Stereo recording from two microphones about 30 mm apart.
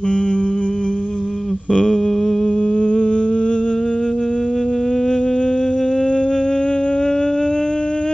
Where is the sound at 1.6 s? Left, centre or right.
Left.